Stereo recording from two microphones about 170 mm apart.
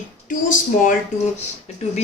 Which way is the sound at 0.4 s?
50° left (ahead or behind).